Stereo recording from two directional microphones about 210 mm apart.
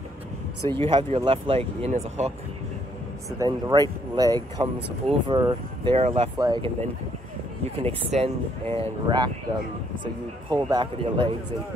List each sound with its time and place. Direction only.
0.7 s speech: 25° right (ahead or behind)
3.3 s speech: 15° right (ahead or behind)
10.5 s speech: 20° right (ahead or behind)